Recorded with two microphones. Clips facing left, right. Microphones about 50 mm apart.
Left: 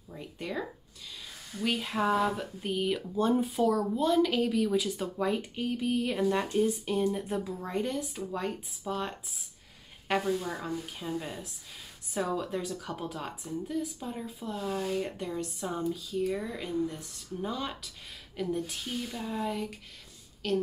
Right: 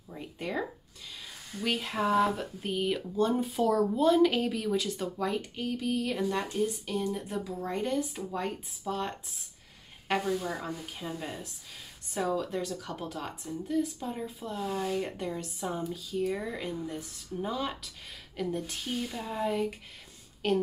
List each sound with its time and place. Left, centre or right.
0.1 s speech: centre
1.6 s a woman's voice: centre
7.5 s a woman's voice: centre
20.4 s a woman's voice: right